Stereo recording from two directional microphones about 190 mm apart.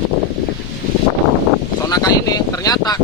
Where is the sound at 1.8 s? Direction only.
20° left (ahead or behind).